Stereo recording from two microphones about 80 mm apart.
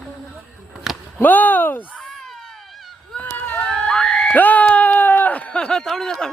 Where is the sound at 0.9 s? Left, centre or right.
Centre.